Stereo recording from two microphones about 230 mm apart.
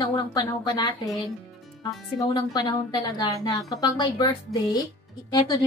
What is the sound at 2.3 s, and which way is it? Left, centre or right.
A woman's voice, centre.